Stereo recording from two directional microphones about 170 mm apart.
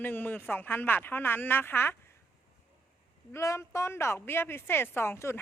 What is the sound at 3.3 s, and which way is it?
A woman's voice, 15° left (ahead or behind).